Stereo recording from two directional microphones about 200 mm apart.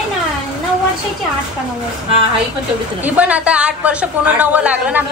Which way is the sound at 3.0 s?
5° right (ahead or behind).